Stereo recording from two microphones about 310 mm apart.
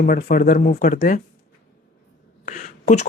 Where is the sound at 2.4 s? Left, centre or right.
Left.